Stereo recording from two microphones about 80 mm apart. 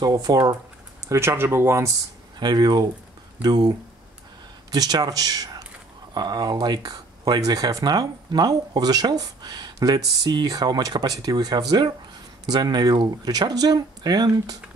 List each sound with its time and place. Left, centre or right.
0.0 s speech: right
1.0 s speech: right
2.3 s speech: right